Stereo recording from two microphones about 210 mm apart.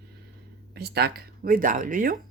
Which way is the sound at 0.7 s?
50° right (ahead or behind).